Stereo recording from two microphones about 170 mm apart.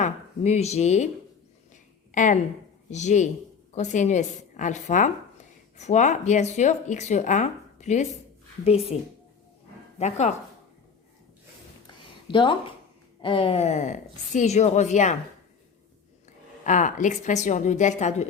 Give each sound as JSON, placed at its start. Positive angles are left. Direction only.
{"t": 0.0, "sound": "speech", "side_deg": 40}
{"t": 2.1, "sound": "a woman's voice", "side_deg": 50}
{"t": 10.0, "sound": "speech", "side_deg": 40}
{"t": 11.9, "sound": "a sound", "side_deg": 30}
{"t": 13.2, "sound": "speech", "side_deg": 30}
{"t": 16.6, "sound": "speech", "side_deg": 50}